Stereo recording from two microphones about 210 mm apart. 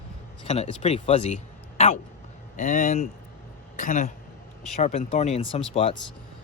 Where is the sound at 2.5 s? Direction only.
35° left (ahead or behind).